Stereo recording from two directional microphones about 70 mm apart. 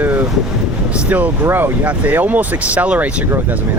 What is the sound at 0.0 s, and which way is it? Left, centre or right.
Wind noise, right.